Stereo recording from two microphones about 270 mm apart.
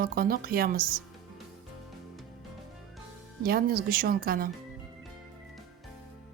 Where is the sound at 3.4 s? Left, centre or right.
Right.